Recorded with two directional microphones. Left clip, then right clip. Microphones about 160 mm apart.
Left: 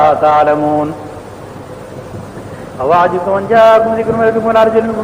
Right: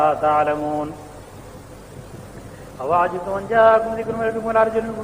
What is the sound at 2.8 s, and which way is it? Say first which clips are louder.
A man's voice: left 9 dB; 40° left (ahead or behind).